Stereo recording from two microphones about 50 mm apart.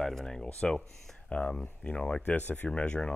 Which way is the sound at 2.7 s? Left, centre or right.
Left.